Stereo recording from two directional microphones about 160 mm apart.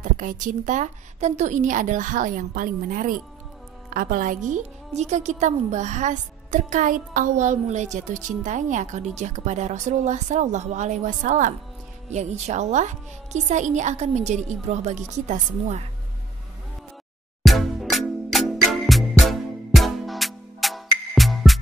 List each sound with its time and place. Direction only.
0.0 s a woman's voice: 55° right (ahead or behind)
17.4 s music: centre (ahead or behind)